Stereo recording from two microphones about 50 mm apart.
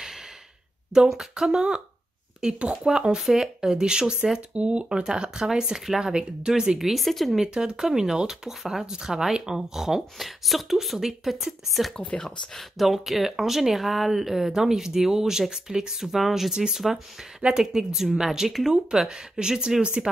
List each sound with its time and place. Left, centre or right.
0.9 s speech: centre
6.9 s speech: centre
7.4 s speech: centre
12.2 s speech: centre
12.7 s speech: centre